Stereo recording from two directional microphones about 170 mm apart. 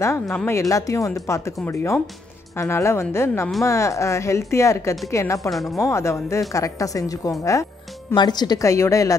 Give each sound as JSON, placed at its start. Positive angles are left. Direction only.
{"t": 0.0, "sound": "speech", "side_deg": 15}
{"t": 5.5, "sound": "a woman's voice", "side_deg": 0}
{"t": 5.8, "sound": "a woman's voice", "side_deg": 15}